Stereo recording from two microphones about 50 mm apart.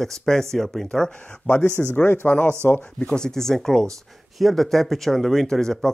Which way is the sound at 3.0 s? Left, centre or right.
Centre.